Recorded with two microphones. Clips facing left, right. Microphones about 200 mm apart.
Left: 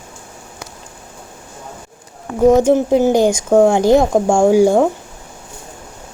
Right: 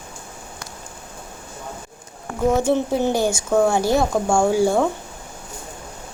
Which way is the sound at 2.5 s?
15° left (ahead or behind).